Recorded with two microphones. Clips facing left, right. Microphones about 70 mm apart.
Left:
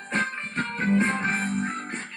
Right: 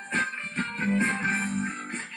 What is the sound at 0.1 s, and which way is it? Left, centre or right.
Music, left.